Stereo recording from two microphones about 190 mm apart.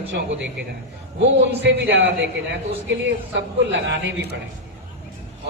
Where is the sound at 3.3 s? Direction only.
70° right (ahead or behind).